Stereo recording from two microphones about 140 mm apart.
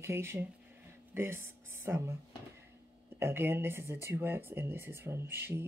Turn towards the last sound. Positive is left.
turn(degrees=-15)  # may be behind; listen again after turning